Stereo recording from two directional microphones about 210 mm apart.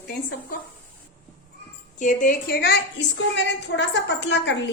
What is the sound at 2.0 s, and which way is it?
A woman's voice, 40° left (ahead or behind).